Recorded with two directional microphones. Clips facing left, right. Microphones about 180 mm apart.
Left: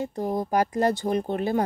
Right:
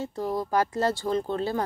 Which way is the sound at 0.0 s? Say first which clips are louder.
Left 2 dB; 15° left (ahead or behind).